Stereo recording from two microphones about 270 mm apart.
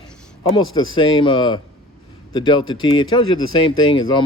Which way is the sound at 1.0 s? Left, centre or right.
Centre.